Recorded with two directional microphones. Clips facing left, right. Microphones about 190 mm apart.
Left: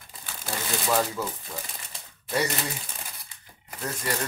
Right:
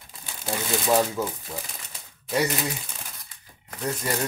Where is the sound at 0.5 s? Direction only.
20° right (ahead or behind).